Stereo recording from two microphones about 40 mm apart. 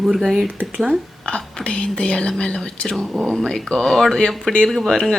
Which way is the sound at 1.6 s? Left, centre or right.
Left.